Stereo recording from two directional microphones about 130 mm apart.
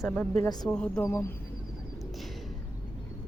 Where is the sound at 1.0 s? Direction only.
20° left (ahead or behind).